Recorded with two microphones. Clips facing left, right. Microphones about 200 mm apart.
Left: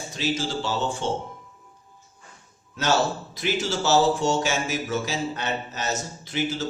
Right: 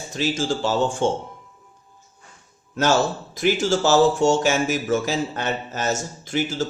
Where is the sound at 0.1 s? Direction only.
50° right (ahead or behind).